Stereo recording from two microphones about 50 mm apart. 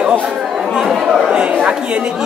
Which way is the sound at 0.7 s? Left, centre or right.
Centre.